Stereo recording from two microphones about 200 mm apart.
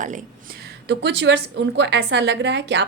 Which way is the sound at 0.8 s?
60° right (ahead or behind).